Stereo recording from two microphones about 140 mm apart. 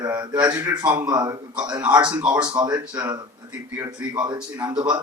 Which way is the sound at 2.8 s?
10° right (ahead or behind).